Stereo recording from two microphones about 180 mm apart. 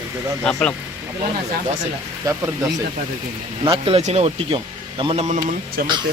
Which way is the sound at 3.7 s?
30° right (ahead or behind).